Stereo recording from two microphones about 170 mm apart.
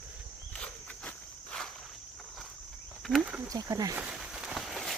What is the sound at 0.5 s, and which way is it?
Insect, 5° left (ahead or behind).